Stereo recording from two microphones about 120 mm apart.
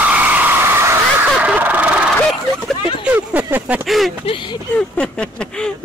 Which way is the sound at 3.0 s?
15° right (ahead or behind).